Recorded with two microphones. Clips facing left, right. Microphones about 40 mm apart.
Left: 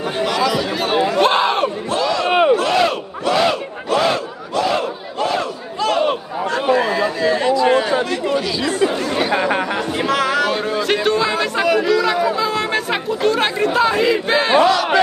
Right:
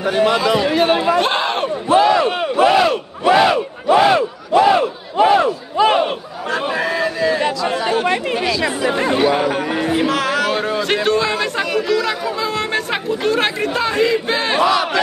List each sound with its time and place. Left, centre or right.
0.5 s a sound: centre
1.9 s crowd: right
2.2 s battle cry: left
2.5 s battle cry: centre
6.0 s chatter: centre
7.5 s chatter: left
7.8 s chatter: right
9.9 s a sound: centre